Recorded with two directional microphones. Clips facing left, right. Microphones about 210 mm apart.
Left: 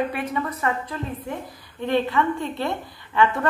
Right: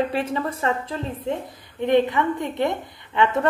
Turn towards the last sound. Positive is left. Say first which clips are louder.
# right 1 dB
turn(degrees=-20)  # may be behind; listen again after turning